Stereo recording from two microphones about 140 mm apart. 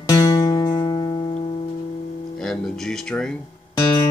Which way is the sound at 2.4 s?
5° left (ahead or behind).